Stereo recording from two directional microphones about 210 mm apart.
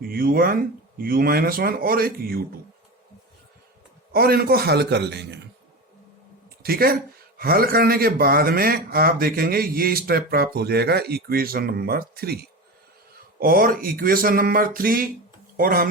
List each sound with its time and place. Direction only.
0.1 s speech: 45° right (ahead or behind)
4.1 s speech: 45° right (ahead or behind)
6.6 s a woman's voice: 45° right (ahead or behind)